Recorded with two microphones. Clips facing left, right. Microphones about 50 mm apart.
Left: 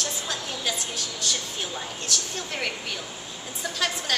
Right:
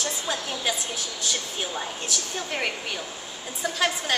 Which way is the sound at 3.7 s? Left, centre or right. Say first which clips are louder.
Right 3 dB; centre.